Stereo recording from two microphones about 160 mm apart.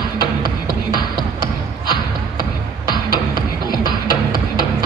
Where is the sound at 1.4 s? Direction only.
25° left (ahead or behind).